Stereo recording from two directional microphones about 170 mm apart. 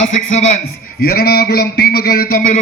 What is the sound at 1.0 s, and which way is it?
A man's voice, 65° left (ahead or behind).